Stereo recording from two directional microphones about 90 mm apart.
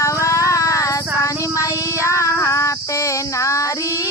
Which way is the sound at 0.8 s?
35° left (ahead or behind).